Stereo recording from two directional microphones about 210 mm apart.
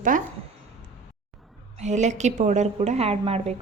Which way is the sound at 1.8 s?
35° right (ahead or behind).